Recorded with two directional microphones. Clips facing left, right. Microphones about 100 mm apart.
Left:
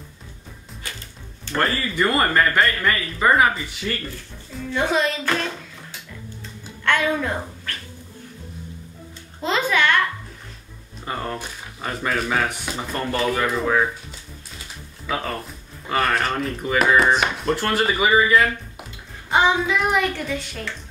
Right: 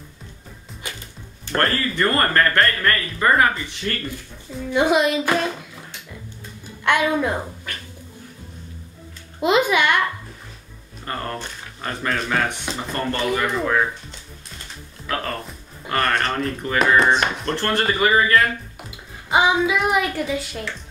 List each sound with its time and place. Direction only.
0.8 s music: 15° right (ahead or behind)
1.5 s speech: 5° left (ahead or behind)
4.6 s music: 15° right (ahead or behind)
6.8 s speech: 15° right (ahead or behind)
9.4 s music: 15° right (ahead or behind)
11.1 s speech: 10° left (ahead or behind)
15.0 s speech: 5° left (ahead or behind)